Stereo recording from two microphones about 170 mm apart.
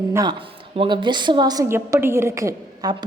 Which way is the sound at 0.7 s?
30° right (ahead or behind).